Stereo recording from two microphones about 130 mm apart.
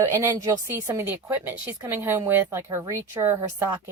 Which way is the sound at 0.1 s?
25° right (ahead or behind).